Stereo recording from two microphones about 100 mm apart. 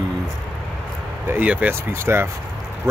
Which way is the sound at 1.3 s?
15° right (ahead or behind).